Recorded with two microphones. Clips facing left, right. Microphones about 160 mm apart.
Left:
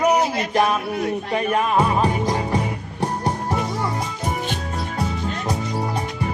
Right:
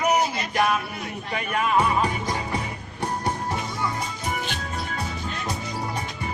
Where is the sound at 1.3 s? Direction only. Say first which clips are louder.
Left 3 dB; 35° left (ahead or behind).